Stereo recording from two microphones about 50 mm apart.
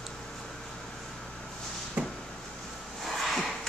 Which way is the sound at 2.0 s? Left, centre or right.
Right.